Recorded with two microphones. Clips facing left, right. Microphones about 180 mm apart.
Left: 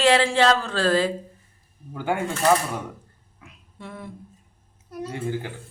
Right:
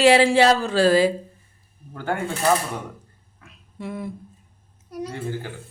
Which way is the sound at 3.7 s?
5° right (ahead or behind).